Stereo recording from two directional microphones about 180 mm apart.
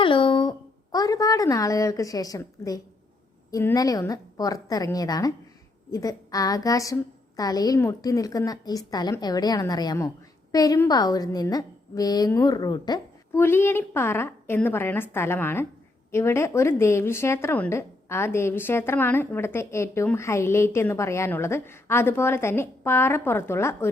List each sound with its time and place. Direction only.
0.0 s a woman's voice: 30° left (ahead or behind)